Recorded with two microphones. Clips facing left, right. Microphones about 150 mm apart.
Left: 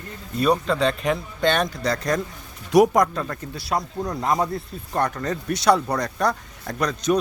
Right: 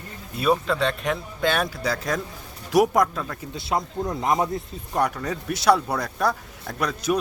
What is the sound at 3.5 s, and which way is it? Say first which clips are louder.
Speech: right 2 dB; 20° right (ahead or behind).